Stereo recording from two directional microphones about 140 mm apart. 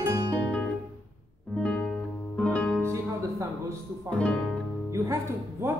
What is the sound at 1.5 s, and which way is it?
Music, 5° left (ahead or behind).